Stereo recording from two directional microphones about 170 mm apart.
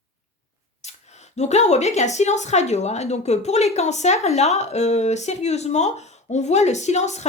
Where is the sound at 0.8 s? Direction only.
40° left (ahead or behind).